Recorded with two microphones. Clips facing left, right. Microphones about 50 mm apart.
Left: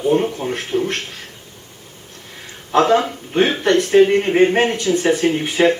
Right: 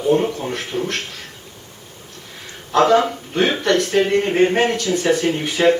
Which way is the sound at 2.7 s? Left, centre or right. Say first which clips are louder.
Even; left.